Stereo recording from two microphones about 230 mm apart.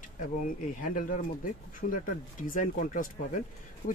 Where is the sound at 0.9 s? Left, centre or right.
Left.